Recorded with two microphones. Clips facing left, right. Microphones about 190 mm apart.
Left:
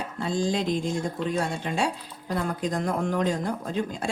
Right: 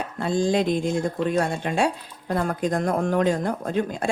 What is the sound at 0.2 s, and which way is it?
Speech, 55° right (ahead or behind).